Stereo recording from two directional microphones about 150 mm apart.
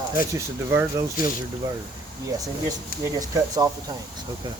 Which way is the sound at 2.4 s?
25° right (ahead or behind).